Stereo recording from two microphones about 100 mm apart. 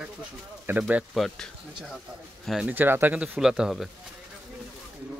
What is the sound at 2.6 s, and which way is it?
Speech, 20° right (ahead or behind).